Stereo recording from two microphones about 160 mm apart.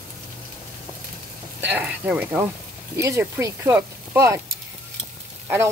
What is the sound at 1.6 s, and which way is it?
Frying, 10° right (ahead or behind).